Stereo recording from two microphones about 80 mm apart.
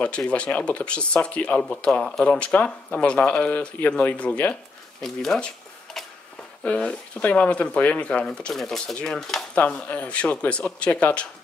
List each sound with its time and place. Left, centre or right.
0.0 s speech: centre
6.0 s a sound: centre
6.6 s speech: centre